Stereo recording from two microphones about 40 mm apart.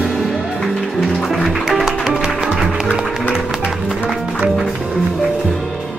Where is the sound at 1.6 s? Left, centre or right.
Centre.